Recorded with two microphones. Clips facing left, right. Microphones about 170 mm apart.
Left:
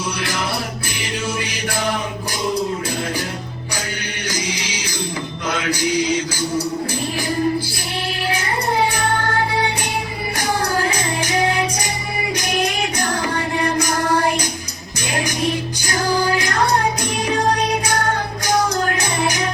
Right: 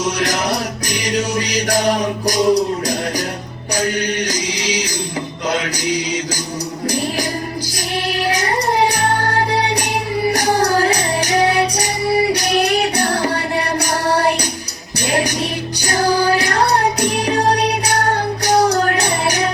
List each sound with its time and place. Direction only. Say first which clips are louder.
0.9 s music: right 8 dB; 40° right (ahead or behind)
5.5 s music: right 1 dB; 35° right (ahead or behind)
5.8 s music: left 1 dB; 15° right (ahead or behind)
8.3 s music: right 3 dB; 40° right (ahead or behind)
15.8 s music: right 5 dB; 35° right (ahead or behind)